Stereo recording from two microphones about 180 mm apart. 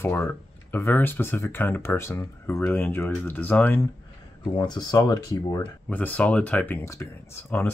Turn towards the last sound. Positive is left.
turn(degrees=15)  # may be behind; listen again after turning